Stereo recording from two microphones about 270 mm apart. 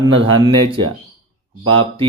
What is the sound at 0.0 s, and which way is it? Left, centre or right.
Speech, centre.